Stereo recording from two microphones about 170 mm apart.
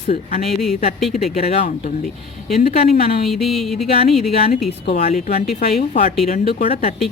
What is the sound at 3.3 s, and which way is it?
Music, centre (ahead or behind).